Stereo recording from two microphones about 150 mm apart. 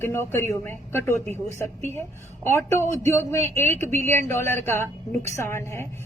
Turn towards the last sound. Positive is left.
turn(degrees=15)  # may be behind; listen again after turning